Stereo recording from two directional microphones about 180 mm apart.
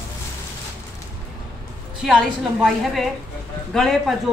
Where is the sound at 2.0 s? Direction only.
Centre (ahead or behind).